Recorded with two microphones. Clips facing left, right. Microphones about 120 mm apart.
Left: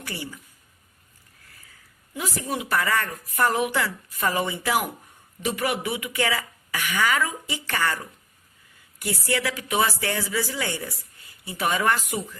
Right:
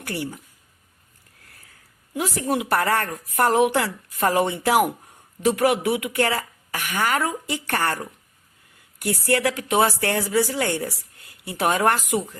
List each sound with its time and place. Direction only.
0.0 s speech: 60° right (ahead or behind)
2.1 s a woman's voice: 65° right (ahead or behind)
9.0 s a woman's voice: 60° right (ahead or behind)